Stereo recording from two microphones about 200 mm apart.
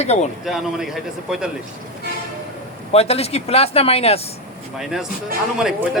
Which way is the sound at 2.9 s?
30° left (ahead or behind).